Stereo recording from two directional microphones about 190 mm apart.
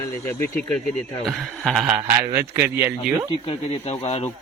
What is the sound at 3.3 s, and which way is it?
Speech, 30° left (ahead or behind).